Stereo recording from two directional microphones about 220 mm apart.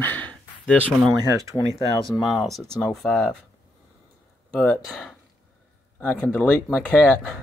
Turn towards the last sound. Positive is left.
turn(degrees=10)  # may be behind; listen again after turning